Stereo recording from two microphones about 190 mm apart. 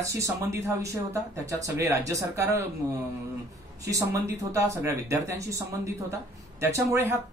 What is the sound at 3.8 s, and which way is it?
Speech, 15° right (ahead or behind).